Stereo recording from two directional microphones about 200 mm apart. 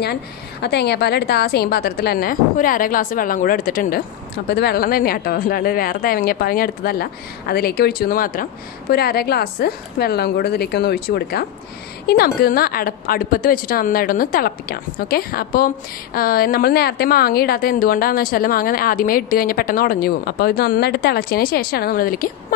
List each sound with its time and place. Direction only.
0.0 s a woman's voice: 55° left (ahead or behind)